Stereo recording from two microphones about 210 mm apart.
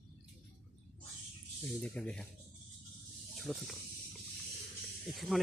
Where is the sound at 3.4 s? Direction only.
Centre (ahead or behind).